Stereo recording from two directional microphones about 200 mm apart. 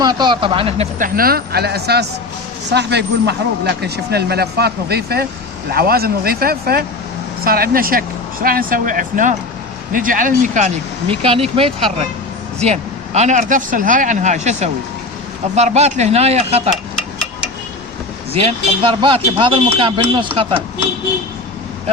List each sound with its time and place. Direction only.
0.0 s speech: 20° right (ahead or behind)
0.9 s a man's voice: 45° right (ahead or behind)
11.1 s speech: 30° right (ahead or behind)
12.5 s a man's voice: 35° right (ahead or behind)
18.3 s speech: 30° right (ahead or behind)